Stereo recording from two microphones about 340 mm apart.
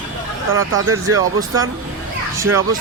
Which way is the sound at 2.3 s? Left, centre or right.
Centre.